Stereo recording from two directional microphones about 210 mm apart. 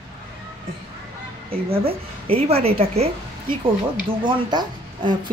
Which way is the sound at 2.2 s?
30° right (ahead or behind).